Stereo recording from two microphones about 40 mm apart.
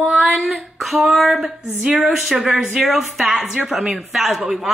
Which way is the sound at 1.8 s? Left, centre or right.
Centre.